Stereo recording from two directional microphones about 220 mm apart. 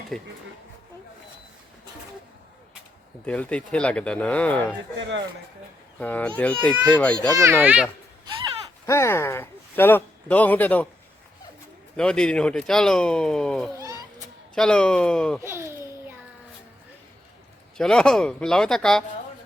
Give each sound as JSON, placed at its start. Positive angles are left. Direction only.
{"t": 0.1, "sound": "speech", "side_deg": 0}
{"t": 3.2, "sound": "speech", "side_deg": 5}
{"t": 4.9, "sound": "a man's voice", "side_deg": -55}
{"t": 6.0, "sound": "speech", "side_deg": 5}
{"t": 7.3, "sound": "speech", "side_deg": -10}
{"t": 8.9, "sound": "speech", "side_deg": 10}
{"t": 11.9, "sound": "speech", "side_deg": 5}
{"t": 15.4, "sound": "a sound", "side_deg": -10}
{"t": 17.7, "sound": "speech", "side_deg": 5}